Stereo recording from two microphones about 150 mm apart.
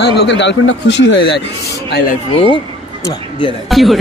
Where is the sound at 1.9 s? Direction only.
90° left.